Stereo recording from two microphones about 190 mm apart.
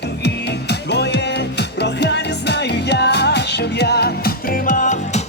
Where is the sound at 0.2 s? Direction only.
60° left (ahead or behind).